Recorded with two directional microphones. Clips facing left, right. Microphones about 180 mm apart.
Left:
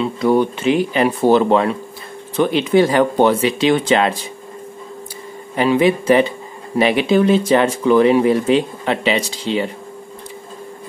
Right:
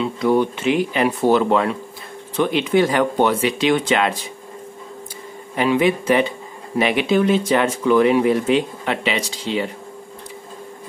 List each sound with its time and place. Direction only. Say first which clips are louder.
0.0 s speech: left 2 dB; 35° left (ahead or behind)
5.6 s speech: left 3 dB; 35° left (ahead or behind)